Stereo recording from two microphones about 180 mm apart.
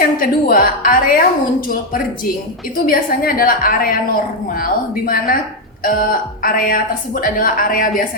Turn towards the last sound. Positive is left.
turn(degrees=50)  # may be behind; listen again after turning